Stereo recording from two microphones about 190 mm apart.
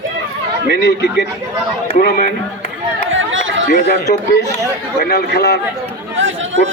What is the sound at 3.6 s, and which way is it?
A man's voice, 55° left (ahead or behind).